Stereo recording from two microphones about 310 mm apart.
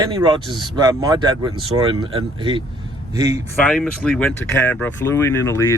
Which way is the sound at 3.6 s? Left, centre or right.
Centre.